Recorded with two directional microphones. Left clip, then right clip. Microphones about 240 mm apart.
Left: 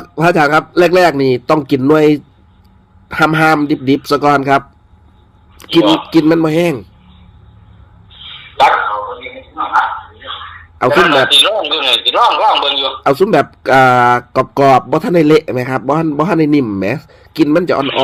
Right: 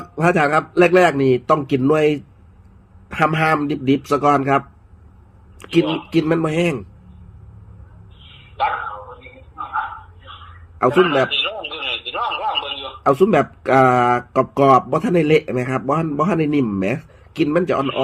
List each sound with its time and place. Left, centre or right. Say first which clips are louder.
0.2 s a man's voice: left 6 dB; left
8.1 s a man's voice: left 14 dB; left